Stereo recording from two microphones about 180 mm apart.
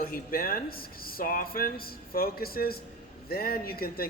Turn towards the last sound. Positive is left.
turn(degrees=55)  # may be behind; listen again after turning